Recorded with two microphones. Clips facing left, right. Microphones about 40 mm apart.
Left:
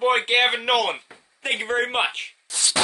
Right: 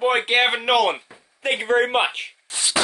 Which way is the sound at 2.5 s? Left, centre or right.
Right.